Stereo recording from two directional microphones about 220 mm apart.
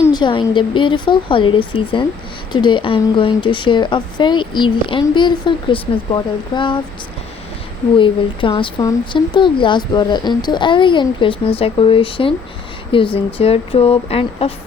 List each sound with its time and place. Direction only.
0.0 s speech: 20° left (ahead or behind)
7.9 s speech: 20° left (ahead or behind)